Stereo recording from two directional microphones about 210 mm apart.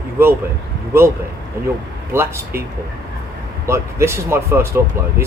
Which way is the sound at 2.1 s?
10° right (ahead or behind).